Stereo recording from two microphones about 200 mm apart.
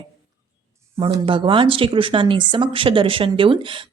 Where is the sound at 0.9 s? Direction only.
25° right (ahead or behind).